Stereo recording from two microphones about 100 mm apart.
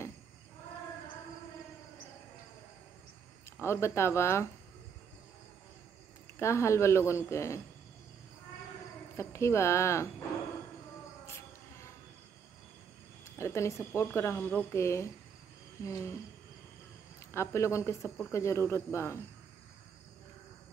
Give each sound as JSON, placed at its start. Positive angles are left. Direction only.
{"t": 3.6, "sound": "a woman's voice", "side_deg": 25}
{"t": 6.4, "sound": "a woman's voice", "side_deg": 30}
{"t": 9.1, "sound": "a woman's voice", "side_deg": 30}
{"t": 11.2, "sound": "a sound", "side_deg": 25}
{"t": 13.2, "sound": "a woman's voice", "side_deg": 30}
{"t": 15.8, "sound": "cricket", "side_deg": 30}
{"t": 17.3, "sound": "a woman's voice", "side_deg": 30}